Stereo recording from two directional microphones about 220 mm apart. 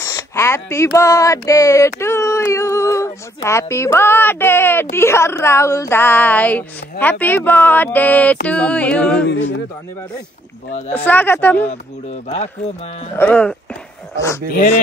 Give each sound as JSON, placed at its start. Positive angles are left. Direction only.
{"t": 0.0, "sound": "speech", "side_deg": 15}
{"t": 8.5, "sound": "music", "side_deg": 5}
{"t": 11.1, "sound": "speech", "side_deg": 10}
{"t": 13.2, "sound": "music", "side_deg": 5}
{"t": 14.5, "sound": "speech", "side_deg": 40}